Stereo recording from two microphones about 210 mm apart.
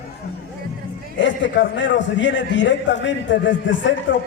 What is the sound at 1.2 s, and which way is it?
A man's voice, 60° left (ahead or behind).